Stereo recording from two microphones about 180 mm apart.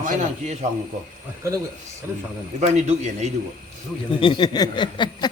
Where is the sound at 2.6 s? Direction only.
40° right (ahead or behind).